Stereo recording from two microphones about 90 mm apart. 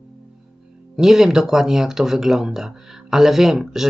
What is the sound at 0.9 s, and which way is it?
Speech, 5° right (ahead or behind).